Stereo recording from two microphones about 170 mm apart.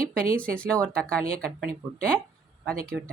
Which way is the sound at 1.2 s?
55° right (ahead or behind).